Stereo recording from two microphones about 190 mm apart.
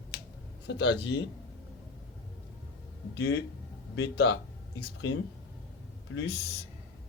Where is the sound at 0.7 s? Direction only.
65° left (ahead or behind).